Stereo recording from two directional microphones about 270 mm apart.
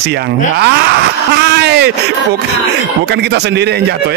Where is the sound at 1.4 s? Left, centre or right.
Right.